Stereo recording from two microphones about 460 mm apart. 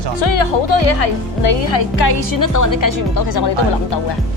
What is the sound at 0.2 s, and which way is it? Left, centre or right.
Speech, left.